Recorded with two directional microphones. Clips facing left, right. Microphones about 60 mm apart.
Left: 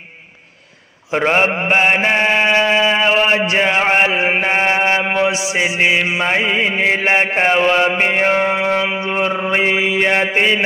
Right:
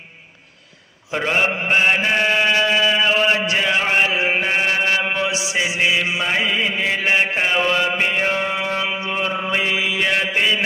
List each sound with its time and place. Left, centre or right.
1.1 s mantra: left